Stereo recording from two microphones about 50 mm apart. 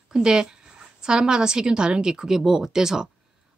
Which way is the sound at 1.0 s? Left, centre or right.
Centre.